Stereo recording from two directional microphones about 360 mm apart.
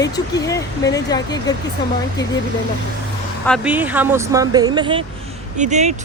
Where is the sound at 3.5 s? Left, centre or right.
Centre.